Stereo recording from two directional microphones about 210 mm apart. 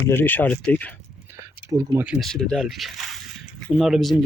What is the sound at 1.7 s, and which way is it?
Speech, 15° right (ahead or behind).